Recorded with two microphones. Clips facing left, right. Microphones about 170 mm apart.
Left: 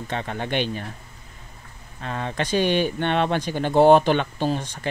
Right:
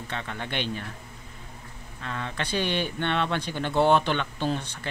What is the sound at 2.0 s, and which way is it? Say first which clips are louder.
Speech: left 5 dB; 50° left (ahead or behind).